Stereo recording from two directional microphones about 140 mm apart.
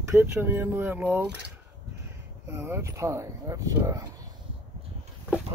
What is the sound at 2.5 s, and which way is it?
Speech, 20° right (ahead or behind).